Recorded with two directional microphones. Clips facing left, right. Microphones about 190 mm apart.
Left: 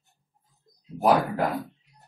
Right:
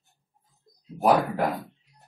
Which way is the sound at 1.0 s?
Centre (ahead or behind).